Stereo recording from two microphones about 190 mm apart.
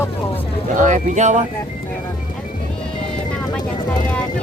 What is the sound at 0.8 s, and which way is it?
Speech, 40° right (ahead or behind).